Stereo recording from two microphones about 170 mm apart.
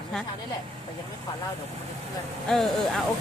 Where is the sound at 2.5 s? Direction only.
Centre (ahead or behind).